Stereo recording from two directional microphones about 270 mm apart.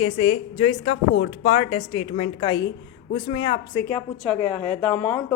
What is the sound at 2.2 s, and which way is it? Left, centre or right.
Speech, centre.